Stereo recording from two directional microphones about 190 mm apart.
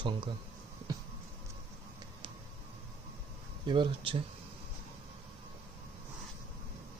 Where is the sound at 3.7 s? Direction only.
25° right (ahead or behind).